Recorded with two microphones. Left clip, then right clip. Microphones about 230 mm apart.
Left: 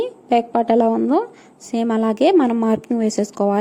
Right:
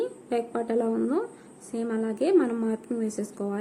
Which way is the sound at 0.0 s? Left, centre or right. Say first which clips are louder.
Left 10 dB; left.